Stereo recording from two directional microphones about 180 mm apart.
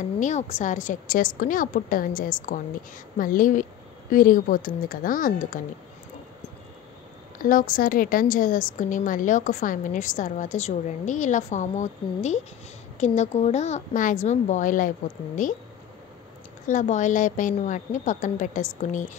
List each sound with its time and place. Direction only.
0.2 s a woman's voice: 40° left (ahead or behind)
7.3 s a woman's voice: 50° left (ahead or behind)
16.6 s a woman's voice: 45° left (ahead or behind)